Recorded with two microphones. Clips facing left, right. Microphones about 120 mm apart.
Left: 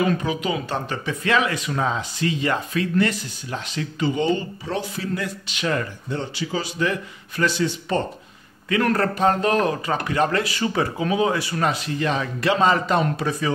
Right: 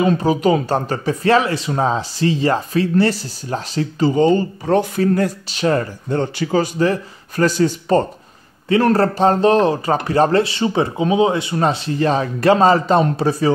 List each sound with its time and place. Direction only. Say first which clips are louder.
0.0 s speech: right 5 dB; 25° right (ahead or behind)
0.3 s speech: right 9 dB; 40° right (ahead or behind)
6.1 s speech: right 9 dB; 55° right (ahead or behind)
8.6 s speech: right 6 dB; 30° right (ahead or behind)